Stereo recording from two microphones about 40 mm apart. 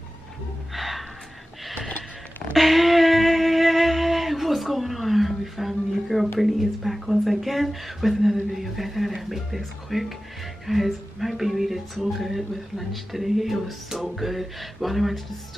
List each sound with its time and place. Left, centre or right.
0.7 s gasp: centre
2.5 s a sound: centre
6.4 s speech: centre